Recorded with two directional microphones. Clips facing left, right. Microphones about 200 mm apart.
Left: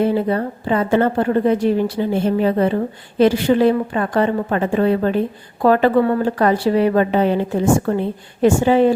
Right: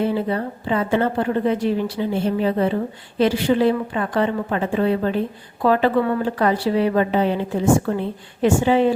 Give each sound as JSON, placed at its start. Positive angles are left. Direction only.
{"t": 0.1, "sound": "a woman's voice", "side_deg": 45}